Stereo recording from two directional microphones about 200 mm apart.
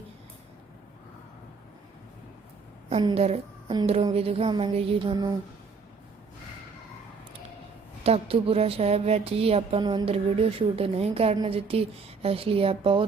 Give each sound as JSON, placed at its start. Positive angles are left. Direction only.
{"t": 2.9, "sound": "a woman's voice", "side_deg": -25}
{"t": 8.0, "sound": "speech", "side_deg": -30}